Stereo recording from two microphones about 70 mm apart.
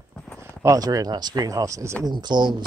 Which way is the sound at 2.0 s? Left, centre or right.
Right.